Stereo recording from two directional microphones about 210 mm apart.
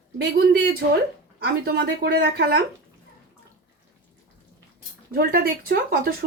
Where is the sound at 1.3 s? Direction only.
50° right (ahead or behind).